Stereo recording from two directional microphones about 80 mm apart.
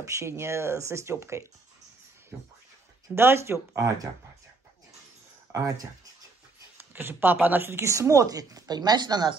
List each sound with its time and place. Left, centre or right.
0.0 s speech: right
3.2 s speech: right
5.5 s speech: right
6.9 s speech: right